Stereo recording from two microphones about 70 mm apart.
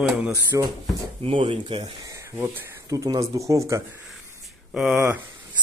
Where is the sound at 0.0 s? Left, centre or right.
Centre.